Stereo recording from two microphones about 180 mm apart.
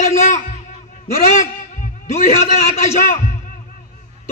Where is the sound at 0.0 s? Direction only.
40° left (ahead or behind).